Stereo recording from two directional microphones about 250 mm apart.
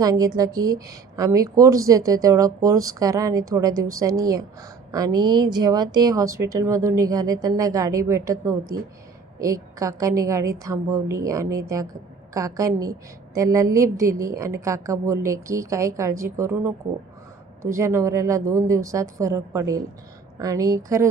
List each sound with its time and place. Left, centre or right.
0.0 s a woman's voice: centre